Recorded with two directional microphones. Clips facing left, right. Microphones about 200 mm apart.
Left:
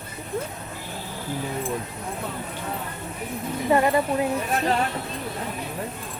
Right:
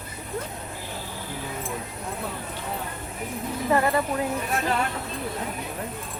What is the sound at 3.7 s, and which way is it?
A woman's voice, 20° left (ahead or behind).